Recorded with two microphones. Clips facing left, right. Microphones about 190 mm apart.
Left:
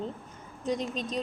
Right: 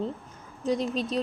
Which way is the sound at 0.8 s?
35° right (ahead or behind).